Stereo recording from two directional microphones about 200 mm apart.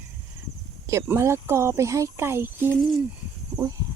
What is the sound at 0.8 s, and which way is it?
Speech, 15° right (ahead or behind).